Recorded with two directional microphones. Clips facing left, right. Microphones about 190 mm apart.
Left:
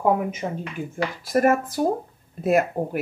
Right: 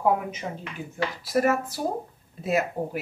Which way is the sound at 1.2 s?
50° left (ahead or behind).